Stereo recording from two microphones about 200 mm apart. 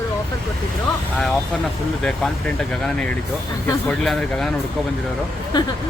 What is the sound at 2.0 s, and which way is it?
Speech, 5° left (ahead or behind).